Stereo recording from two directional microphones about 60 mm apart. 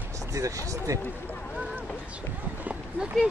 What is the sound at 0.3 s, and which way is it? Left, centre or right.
Speech, right.